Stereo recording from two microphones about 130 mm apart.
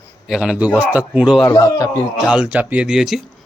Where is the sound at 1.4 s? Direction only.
25° left (ahead or behind).